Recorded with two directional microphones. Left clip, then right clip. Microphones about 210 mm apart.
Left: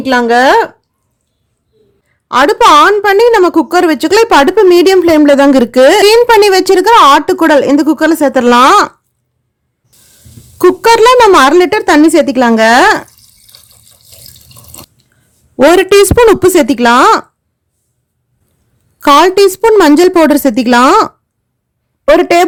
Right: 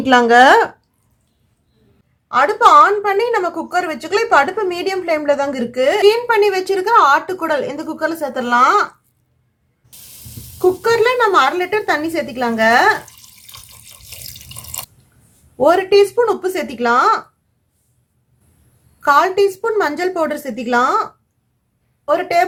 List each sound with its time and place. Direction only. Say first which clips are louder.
0.0 s speech: left 2 dB; 10° left (ahead or behind)
2.3 s a woman's voice: left 5 dB; 45° left (ahead or behind)
10.8 s a woman's voice: left 11 dB; 55° left (ahead or behind)
15.7 s a woman's voice: left 6 dB; 55° left (ahead or behind)
18.9 s a woman's voice: left 7 dB; 55° left (ahead or behind)
22.2 s a woman's voice: left 8 dB; 55° left (ahead or behind)